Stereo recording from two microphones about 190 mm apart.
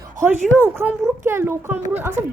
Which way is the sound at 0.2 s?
10° right (ahead or behind).